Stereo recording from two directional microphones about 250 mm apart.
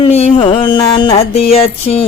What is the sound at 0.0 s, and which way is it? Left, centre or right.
Music, left.